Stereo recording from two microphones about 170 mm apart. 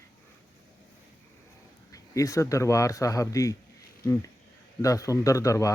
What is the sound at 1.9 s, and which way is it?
Speech, 20° left (ahead or behind).